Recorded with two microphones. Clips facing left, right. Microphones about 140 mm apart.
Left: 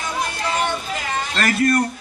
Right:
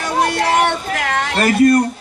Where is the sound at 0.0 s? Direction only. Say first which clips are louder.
Right 8 dB; 70° right (ahead or behind).